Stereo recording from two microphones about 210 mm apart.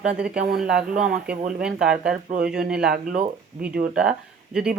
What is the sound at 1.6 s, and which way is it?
Speech, 5° right (ahead or behind).